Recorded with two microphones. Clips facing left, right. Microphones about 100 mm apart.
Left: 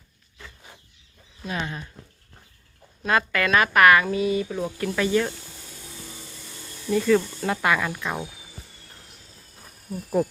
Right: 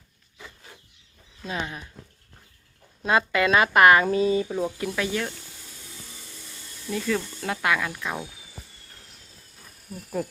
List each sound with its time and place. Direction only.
1.5 s speech: 15° right (ahead or behind)
3.0 s speech: 20° right (ahead or behind)
4.5 s speech: 10° right (ahead or behind)
6.9 s speech: centre (ahead or behind)
9.9 s speech: 20° left (ahead or behind)